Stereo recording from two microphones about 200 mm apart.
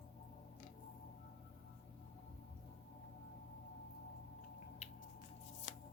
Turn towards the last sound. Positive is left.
turn(degrees=40)  # may be behind; listen again after turning